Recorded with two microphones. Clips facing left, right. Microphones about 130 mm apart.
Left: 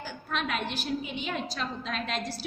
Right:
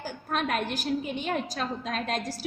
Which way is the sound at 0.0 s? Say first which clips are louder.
Right 3 dB; 40° right (ahead or behind).